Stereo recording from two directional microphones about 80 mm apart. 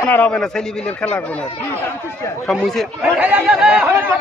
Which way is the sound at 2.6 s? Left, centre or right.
Centre.